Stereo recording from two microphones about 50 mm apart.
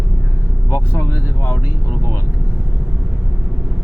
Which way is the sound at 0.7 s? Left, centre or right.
Left.